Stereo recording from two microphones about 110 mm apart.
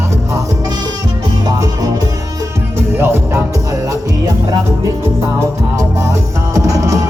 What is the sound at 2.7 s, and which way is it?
Music, 20° right (ahead or behind).